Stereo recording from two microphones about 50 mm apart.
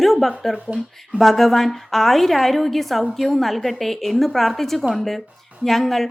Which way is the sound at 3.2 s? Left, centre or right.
Centre.